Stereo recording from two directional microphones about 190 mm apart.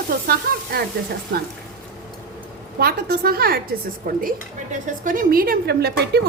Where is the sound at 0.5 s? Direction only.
50° right (ahead or behind).